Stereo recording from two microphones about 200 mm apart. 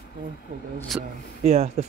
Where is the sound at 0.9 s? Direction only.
Centre (ahead or behind).